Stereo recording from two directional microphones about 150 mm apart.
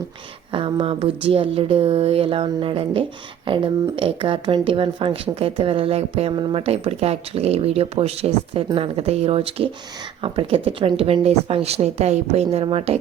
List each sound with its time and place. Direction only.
0.5 s speech: 35° right (ahead or behind)